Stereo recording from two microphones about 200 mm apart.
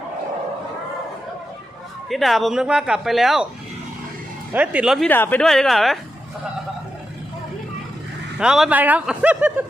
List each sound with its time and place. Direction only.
2.0 s speech: centre (ahead or behind)
4.5 s speech: 5° right (ahead or behind)
5.0 s speech: 10° left (ahead or behind)
8.4 s speech: 5° right (ahead or behind)